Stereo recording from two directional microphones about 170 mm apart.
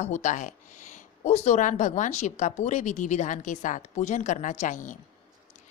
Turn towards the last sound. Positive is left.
turn(degrees=50)  # may be behind; listen again after turning